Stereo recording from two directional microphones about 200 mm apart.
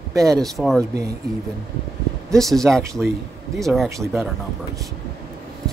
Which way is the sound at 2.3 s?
Centre (ahead or behind).